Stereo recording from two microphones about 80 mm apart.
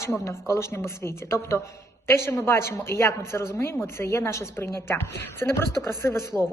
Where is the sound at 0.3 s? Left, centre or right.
Left.